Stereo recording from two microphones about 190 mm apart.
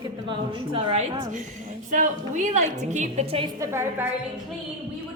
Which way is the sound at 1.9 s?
40° right (ahead or behind).